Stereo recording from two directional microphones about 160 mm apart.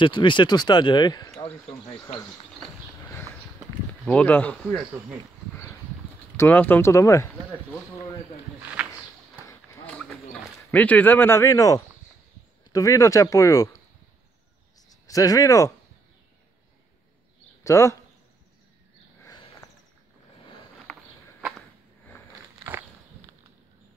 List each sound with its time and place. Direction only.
0.0 s speech: 30° left (ahead or behind)
4.0 s speech: 5° left (ahead or behind)
6.3 s speech: 10° left (ahead or behind)
10.7 s speech: 10° left (ahead or behind)
14.9 s speech: 20° left (ahead or behind)
17.6 s speech: 15° left (ahead or behind)
19.2 s a sound: 25° left (ahead or behind)
20.8 s a sound: 5° right (ahead or behind)